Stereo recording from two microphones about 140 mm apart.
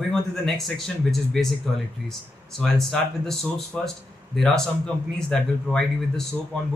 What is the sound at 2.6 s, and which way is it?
Speech, 5° left (ahead or behind).